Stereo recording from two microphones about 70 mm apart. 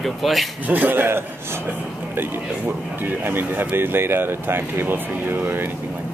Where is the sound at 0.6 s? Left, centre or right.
Right.